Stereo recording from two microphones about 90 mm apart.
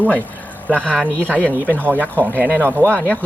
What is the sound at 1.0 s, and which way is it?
Speech, 20° right (ahead or behind).